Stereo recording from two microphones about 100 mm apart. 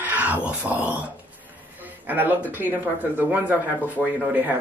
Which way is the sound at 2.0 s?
20° right (ahead or behind).